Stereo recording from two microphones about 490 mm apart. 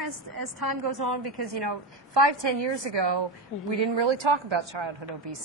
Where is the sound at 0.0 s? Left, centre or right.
Right.